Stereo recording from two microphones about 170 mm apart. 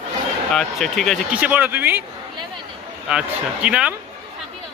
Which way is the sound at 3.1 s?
5° right (ahead or behind).